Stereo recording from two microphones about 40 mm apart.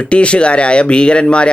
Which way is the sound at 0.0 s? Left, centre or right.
Left.